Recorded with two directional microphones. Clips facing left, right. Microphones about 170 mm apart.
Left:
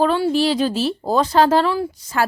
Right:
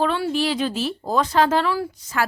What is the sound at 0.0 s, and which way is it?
Speech, 35° left (ahead or behind).